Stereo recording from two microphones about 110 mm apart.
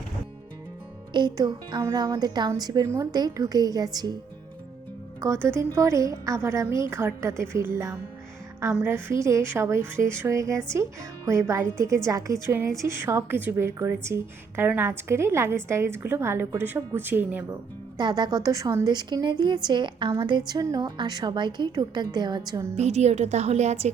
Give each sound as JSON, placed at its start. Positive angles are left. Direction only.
{"t": 1.1, "sound": "a woman's voice", "side_deg": -45}
{"t": 5.2, "sound": "a woman's voice", "side_deg": -25}
{"t": 17.9, "sound": "a woman's voice", "side_deg": -40}
{"t": 22.7, "sound": "a woman's voice", "side_deg": -90}